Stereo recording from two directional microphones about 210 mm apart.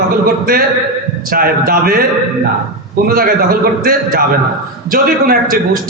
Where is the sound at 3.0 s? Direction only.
45° right (ahead or behind).